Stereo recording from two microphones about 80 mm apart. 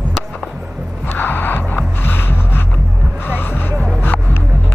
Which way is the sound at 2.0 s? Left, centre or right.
Left.